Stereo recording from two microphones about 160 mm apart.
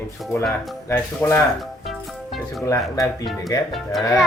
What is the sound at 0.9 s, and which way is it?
Speech, 15° left (ahead or behind).